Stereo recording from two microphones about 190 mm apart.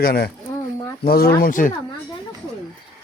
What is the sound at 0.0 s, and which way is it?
A man's voice, 55° left (ahead or behind).